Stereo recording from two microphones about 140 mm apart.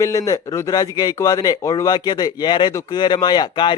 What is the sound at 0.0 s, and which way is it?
A man's voice, 25° left (ahead or behind).